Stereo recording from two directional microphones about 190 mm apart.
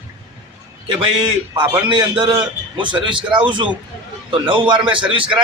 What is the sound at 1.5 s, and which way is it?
Speech, 25° right (ahead or behind).